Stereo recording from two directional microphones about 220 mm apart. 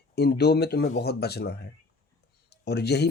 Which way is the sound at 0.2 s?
45° left (ahead or behind).